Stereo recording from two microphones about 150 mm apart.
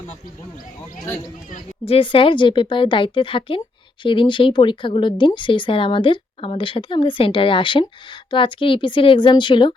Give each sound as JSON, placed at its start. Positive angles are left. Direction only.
{"t": 1.9, "sound": "speech", "side_deg": 35}